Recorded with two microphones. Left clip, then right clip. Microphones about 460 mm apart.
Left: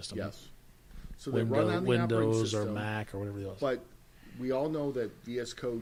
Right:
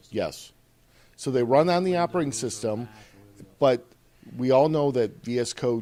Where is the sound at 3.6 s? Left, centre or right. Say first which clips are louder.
Right 13 dB; right.